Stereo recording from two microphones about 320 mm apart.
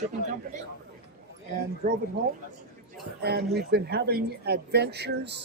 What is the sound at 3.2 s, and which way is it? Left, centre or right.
A man's voice, right.